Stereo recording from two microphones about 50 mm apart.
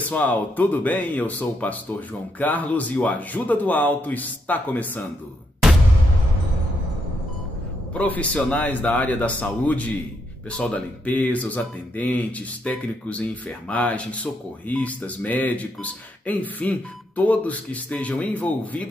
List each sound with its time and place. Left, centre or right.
0.1 s speech: left
7.9 s speech: left